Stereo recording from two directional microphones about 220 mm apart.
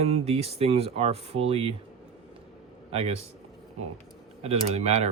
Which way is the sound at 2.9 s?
25° right (ahead or behind).